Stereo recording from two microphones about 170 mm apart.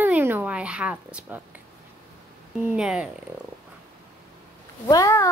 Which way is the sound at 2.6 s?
5° right (ahead or behind).